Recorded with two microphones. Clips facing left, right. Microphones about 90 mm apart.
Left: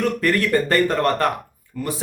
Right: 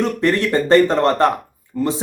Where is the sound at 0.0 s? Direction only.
25° right (ahead or behind).